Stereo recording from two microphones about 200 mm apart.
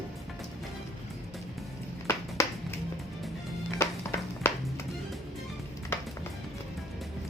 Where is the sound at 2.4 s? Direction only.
15° left (ahead or behind).